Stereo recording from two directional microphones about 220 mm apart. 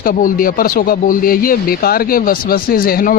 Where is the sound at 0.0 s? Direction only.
40° left (ahead or behind).